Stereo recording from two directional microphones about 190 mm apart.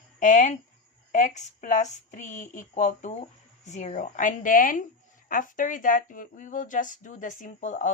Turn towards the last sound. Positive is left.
turn(degrees=40)  # may be behind; listen again after turning